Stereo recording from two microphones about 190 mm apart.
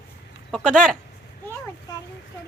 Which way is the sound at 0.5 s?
5° left (ahead or behind).